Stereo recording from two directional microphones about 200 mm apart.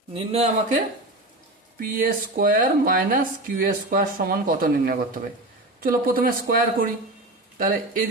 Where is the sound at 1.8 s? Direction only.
45° right (ahead or behind).